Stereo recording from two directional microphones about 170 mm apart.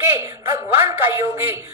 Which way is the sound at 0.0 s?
15° right (ahead or behind).